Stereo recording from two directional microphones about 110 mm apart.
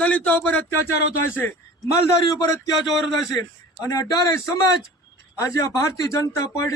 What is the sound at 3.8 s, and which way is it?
A man's voice, 35° left (ahead or behind).